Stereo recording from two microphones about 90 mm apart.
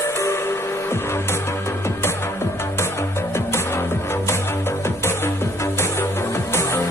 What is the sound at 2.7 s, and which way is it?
Music, 30° left (ahead or behind).